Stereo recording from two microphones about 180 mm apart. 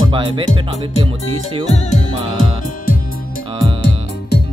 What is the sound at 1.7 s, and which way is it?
Music, 40° left (ahead or behind).